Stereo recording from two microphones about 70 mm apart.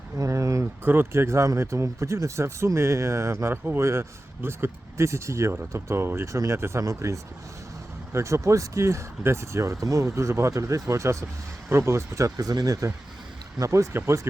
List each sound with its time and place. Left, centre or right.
0.2 s a sound: right
0.9 s speech: right
13.6 s speech: right